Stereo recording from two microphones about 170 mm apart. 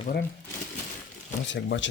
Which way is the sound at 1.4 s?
90° left.